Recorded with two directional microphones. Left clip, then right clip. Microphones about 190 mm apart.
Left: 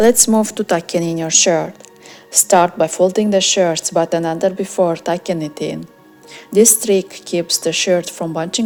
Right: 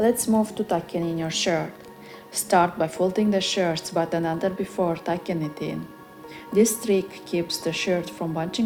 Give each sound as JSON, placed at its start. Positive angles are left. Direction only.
{"t": 0.0, "sound": "a woman's voice", "side_deg": 50}